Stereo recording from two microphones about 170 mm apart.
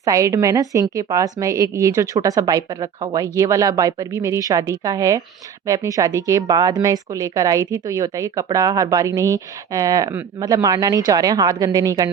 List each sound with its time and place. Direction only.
0.0 s speech: 20° right (ahead or behind)